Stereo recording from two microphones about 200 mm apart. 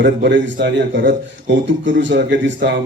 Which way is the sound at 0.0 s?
60° right (ahead or behind).